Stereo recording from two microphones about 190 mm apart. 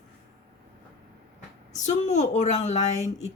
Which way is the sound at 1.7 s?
40° left (ahead or behind).